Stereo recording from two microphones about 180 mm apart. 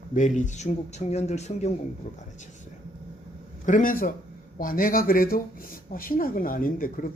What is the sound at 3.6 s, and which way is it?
A man's voice, 45° left (ahead or behind).